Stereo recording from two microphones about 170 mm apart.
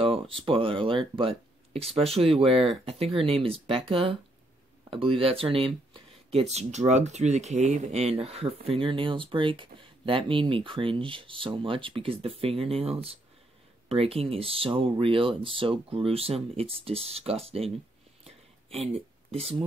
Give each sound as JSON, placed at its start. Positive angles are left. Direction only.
{"t": 0.0, "sound": "speech", "side_deg": -30}
{"t": 18.2, "sound": "a sound", "side_deg": -35}
{"t": 19.3, "sound": "speech", "side_deg": -35}